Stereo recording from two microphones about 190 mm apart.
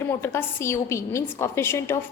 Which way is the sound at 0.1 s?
15° left (ahead or behind).